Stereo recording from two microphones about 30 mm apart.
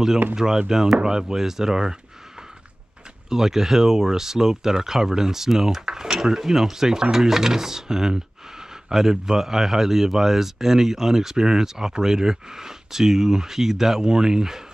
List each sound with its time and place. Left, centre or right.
0.6 s speech: right
3.3 s speech: centre